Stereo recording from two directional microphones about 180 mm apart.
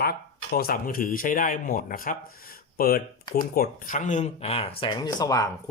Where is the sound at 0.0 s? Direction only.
60° left (ahead or behind).